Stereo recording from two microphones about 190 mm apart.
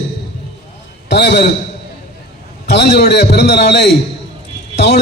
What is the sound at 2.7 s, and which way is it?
A man's voice, 60° left (ahead or behind).